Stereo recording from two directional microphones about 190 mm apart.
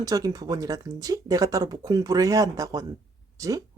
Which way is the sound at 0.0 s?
20° right (ahead or behind).